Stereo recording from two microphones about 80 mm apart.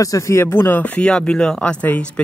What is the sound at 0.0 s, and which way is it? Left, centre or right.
Speech, left.